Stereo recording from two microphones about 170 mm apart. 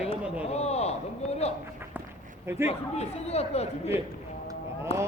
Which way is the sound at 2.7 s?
40° left (ahead or behind).